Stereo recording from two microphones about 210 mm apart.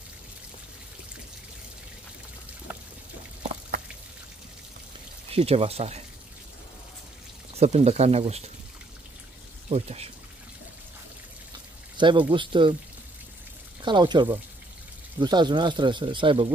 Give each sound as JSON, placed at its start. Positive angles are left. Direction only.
{"t": 2.7, "sound": "pour", "side_deg": -10}
{"t": 5.3, "sound": "speech", "side_deg": -30}
{"t": 7.5, "sound": "speech", "side_deg": -30}
{"t": 9.7, "sound": "speech", "side_deg": -30}
{"t": 12.0, "sound": "speech", "side_deg": -20}
{"t": 13.8, "sound": "speech", "side_deg": -20}